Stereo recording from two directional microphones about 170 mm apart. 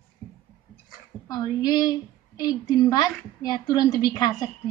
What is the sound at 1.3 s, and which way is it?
A woman's voice, 25° left (ahead or behind).